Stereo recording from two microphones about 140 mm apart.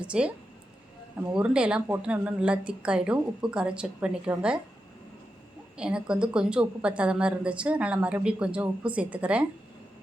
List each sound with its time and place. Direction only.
0.0 s a woman's voice: 10° right (ahead or behind)
5.7 s a woman's voice: 5° right (ahead or behind)